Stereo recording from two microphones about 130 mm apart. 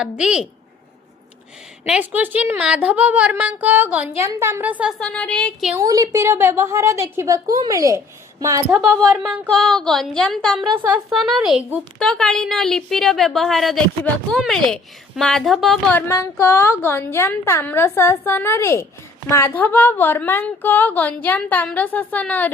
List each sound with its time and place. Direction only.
0.0 s a woman's voice: 5° right (ahead or behind)
1.9 s a woman's voice: 15° right (ahead or behind)
4.9 s a woman's voice: 5° left (ahead or behind)
5.7 s a woman's voice: 30° right (ahead or behind)
9.0 s a woman's voice: centre (ahead or behind)
15.9 s a woman's voice: 15° left (ahead or behind)